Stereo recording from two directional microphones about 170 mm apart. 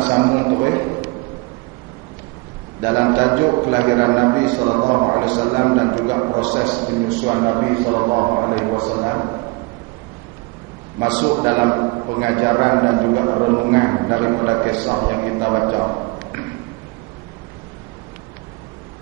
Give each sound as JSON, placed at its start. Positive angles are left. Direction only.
{"t": 0.0, "sound": "a sound", "side_deg": -25}
{"t": 2.8, "sound": "a man's voice", "side_deg": -25}
{"t": 11.0, "sound": "a man's voice", "side_deg": -30}